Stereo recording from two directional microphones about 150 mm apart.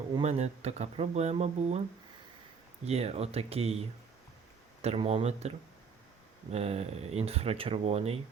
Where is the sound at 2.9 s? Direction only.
45° right (ahead or behind).